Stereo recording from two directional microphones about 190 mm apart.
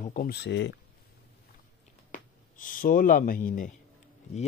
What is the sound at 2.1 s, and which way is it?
A man's voice, 45° left (ahead or behind).